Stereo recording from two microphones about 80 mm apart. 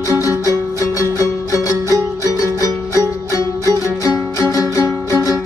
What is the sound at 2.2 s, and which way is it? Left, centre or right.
Music, left.